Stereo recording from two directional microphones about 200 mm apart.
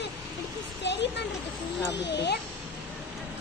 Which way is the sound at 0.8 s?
60° left (ahead or behind).